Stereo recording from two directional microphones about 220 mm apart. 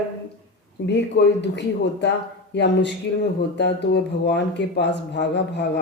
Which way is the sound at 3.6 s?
50° left (ahead or behind).